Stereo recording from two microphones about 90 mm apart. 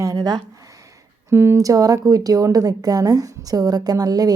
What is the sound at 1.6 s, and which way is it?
Speech, 40° right (ahead or behind).